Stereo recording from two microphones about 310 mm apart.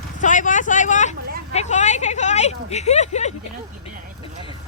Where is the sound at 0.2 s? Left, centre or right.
Left.